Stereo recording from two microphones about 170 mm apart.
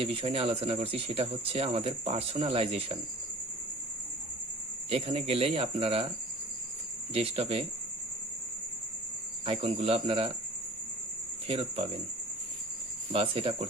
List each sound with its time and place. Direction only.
0.0 s speech: 30° right (ahead or behind)
4.9 s speech: 35° right (ahead or behind)
7.1 s speech: 35° right (ahead or behind)
9.5 s speech: 35° right (ahead or behind)
11.4 s speech: 30° right (ahead or behind)
13.1 s speech: 30° right (ahead or behind)